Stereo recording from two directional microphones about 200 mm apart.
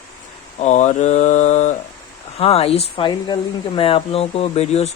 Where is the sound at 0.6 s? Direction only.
35° left (ahead or behind).